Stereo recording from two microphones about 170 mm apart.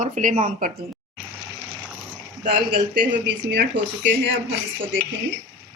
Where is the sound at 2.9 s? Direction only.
80° right.